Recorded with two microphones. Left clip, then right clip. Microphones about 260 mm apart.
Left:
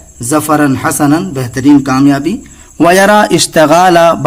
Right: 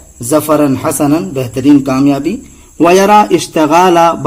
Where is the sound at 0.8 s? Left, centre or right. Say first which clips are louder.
Left 1 dB; left.